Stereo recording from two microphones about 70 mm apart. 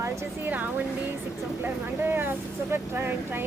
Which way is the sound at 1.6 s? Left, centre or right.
Right.